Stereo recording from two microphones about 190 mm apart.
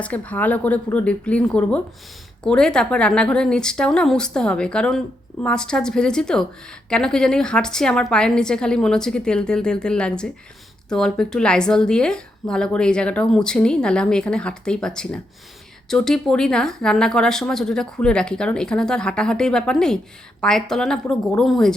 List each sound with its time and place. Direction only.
0.0 s a woman's voice: 10° left (ahead or behind)